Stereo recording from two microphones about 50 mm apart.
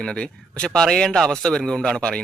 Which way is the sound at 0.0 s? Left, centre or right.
Centre.